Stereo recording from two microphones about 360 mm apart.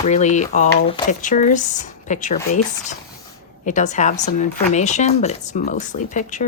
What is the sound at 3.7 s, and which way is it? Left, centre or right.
Speech, centre.